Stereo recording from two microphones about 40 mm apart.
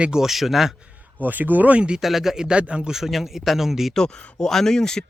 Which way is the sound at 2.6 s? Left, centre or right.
Right.